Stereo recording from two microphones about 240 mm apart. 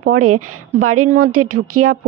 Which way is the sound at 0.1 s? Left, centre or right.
Right.